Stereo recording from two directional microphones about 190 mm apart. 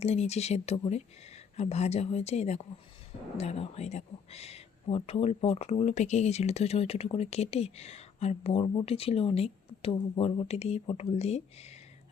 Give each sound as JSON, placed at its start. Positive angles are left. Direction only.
{"t": 0.0, "sound": "speech", "side_deg": 35}